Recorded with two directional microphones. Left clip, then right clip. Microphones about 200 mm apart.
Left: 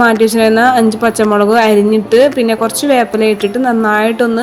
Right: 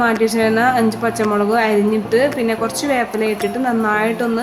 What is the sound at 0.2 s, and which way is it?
A woman's voice, 25° left (ahead or behind).